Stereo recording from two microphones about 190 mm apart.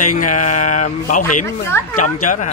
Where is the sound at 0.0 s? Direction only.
45° left (ahead or behind).